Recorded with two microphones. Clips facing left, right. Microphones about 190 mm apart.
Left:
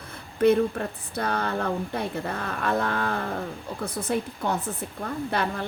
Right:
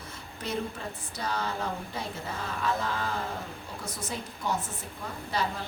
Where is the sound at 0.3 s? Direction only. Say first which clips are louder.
Left 14 dB; 60° left (ahead or behind).